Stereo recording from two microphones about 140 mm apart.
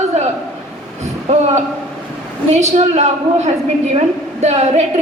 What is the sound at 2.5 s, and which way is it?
A woman's voice, 55° right (ahead or behind).